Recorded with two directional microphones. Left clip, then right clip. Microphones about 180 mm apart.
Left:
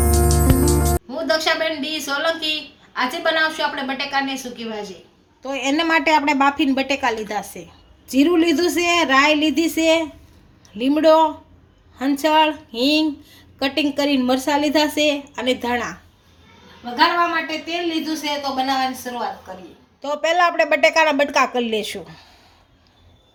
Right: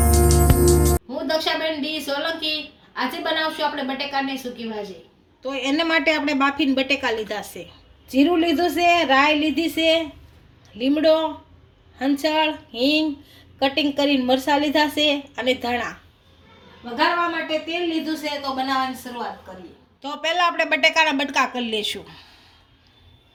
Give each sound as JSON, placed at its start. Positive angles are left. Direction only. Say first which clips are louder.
{"t": 0.0, "sound": "speech", "louder": "even", "side_deg": 0}
{"t": 5.4, "sound": "a woman's voice", "louder": "left 2 dB", "side_deg": 30}
{"t": 8.1, "sound": "a woman's voice", "louder": "left 2 dB", "side_deg": 45}
{"t": 18.0, "sound": "speech", "louder": "left 3 dB", "side_deg": 10}
{"t": 20.0, "sound": "a woman's voice", "louder": "left 4 dB", "side_deg": 25}